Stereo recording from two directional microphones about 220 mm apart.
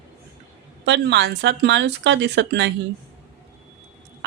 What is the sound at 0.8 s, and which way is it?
A woman's voice, 50° right (ahead or behind).